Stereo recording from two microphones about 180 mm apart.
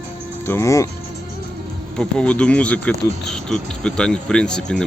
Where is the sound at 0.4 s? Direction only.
15° left (ahead or behind).